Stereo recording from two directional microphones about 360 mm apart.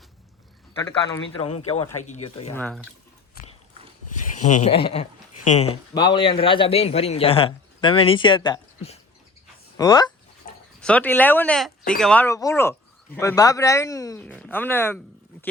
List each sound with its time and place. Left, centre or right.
0.8 s a man's voice: centre
2.5 s speech: centre
4.4 s a man's voice: centre